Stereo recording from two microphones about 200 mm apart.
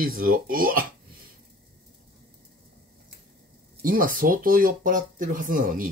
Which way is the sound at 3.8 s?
45° right (ahead or behind).